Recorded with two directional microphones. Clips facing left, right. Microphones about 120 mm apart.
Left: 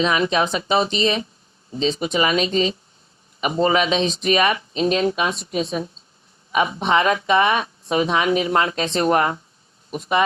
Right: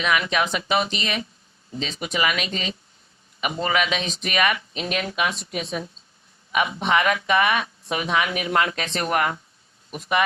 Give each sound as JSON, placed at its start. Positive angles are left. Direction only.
{"t": 0.0, "sound": "speech", "side_deg": 30}